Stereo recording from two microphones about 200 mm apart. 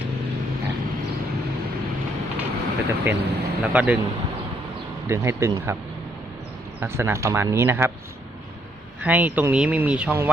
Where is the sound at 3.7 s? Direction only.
5° right (ahead or behind).